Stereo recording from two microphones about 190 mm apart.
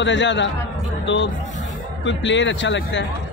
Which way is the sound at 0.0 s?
70° left (ahead or behind).